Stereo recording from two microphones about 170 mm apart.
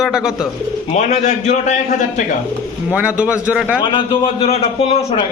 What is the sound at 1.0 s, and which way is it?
A man's voice, 45° left (ahead or behind).